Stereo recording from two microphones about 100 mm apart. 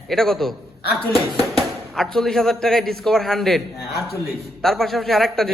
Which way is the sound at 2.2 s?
5° left (ahead or behind).